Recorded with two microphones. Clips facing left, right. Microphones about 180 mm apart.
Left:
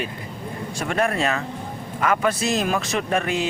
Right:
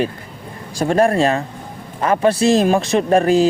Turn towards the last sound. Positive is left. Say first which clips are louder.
# right 9 dB
turn(degrees=-35)  # may be behind; listen again after turning